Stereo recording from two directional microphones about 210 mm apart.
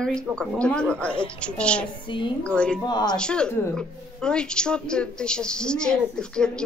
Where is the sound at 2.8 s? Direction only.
20° left (ahead or behind).